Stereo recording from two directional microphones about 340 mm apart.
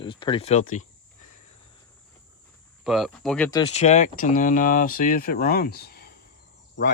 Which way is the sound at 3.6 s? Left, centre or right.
Centre.